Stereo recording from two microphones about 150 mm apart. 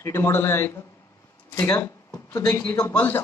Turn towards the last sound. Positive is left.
turn(degrees=10)  # may be behind; listen again after turning